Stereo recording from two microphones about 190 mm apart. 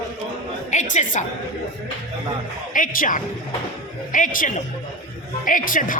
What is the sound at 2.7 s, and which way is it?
A woman's voice, 45° left (ahead or behind).